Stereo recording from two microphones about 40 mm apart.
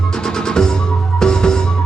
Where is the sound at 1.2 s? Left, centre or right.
Centre.